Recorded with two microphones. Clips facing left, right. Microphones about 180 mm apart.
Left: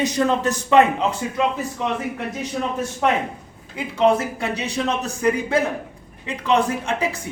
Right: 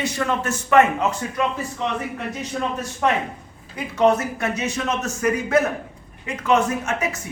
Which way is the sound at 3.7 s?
30° left (ahead or behind).